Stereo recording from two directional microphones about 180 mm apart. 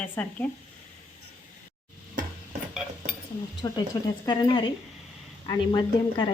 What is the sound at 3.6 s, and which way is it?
Speech, 25° left (ahead or behind).